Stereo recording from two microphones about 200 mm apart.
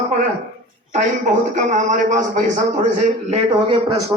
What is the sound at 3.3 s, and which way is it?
Speech, 25° right (ahead or behind).